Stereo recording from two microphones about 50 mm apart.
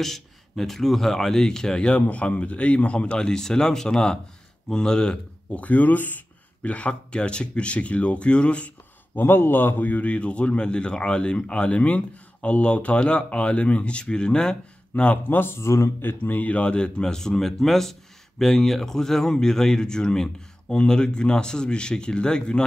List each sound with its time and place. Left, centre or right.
0.0 s speech: centre
5.5 s a man's voice: left
9.1 s a man's voice: left; by 14.6 s centre
14.9 s speech: left
15.2 s a man's voice: left
15.6 s a man's voice: left
16.0 s a man's voice: left; by 22.6 s centre